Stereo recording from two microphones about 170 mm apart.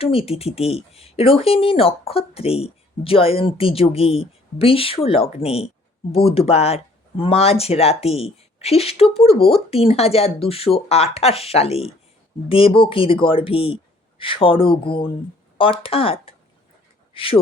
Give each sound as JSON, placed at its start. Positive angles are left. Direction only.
{"t": 0.0, "sound": "speech", "side_deg": 35}
{"t": 17.2, "sound": "speech", "side_deg": 35}